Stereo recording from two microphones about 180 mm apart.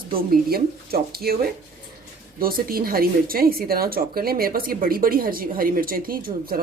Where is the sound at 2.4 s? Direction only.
55° right (ahead or behind).